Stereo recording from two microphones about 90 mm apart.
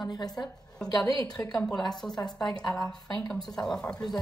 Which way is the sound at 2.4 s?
50° left (ahead or behind).